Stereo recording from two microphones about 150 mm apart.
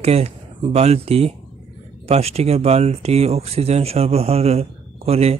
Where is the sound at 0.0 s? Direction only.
45° right (ahead or behind).